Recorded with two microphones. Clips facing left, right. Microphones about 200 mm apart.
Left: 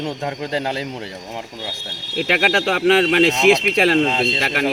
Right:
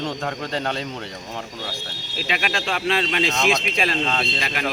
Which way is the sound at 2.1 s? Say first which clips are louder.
Left 8 dB; 70° left (ahead or behind).